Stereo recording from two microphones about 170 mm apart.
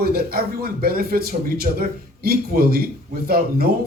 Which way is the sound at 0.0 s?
65° right (ahead or behind).